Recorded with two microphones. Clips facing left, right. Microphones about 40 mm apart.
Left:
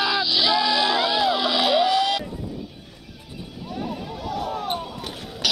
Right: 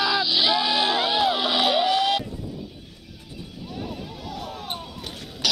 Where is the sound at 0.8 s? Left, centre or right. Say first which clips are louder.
Left 1 dB; centre.